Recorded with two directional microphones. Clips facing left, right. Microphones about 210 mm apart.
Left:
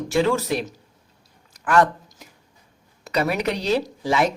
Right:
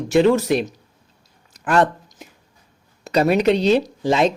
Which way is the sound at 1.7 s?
25° right (ahead or behind).